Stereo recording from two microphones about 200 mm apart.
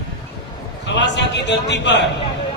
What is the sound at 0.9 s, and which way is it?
A man's voice, 60° left (ahead or behind).